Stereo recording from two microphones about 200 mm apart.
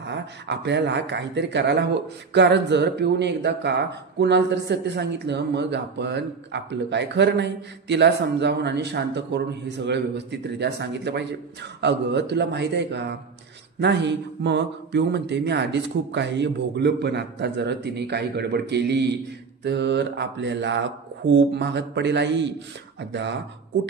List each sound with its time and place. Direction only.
0.0 s speech: 60° right (ahead or behind)